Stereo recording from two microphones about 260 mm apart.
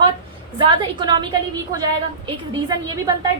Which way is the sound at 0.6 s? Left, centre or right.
Centre.